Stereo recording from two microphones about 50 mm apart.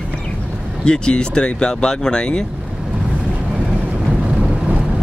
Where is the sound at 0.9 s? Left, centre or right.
Centre.